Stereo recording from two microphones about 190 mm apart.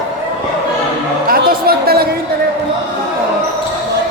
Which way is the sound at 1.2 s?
50° right (ahead or behind).